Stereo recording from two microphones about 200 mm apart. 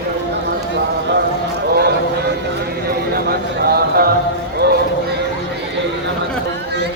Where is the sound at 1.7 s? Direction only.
50° right (ahead or behind).